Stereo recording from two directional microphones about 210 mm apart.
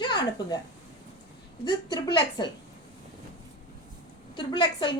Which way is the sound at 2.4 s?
20° left (ahead or behind).